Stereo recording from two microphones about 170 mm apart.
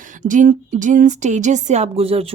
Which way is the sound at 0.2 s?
50° right (ahead or behind).